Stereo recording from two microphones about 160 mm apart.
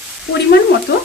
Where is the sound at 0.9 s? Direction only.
90° left.